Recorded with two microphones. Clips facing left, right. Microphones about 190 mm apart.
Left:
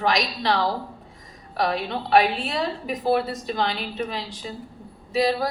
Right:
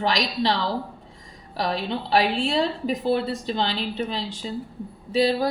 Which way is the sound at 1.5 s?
30° right (ahead or behind).